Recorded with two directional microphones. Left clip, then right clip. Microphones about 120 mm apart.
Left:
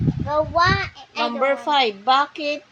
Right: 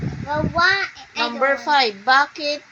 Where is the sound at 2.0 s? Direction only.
40° left (ahead or behind).